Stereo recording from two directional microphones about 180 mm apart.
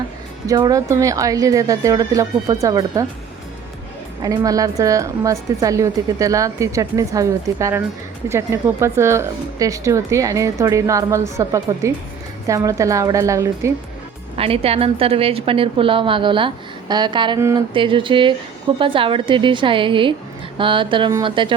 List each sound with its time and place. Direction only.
0.4 s speech: 20° right (ahead or behind)
4.2 s a woman's voice: 20° right (ahead or behind)
14.3 s a woman's voice: 30° right (ahead or behind)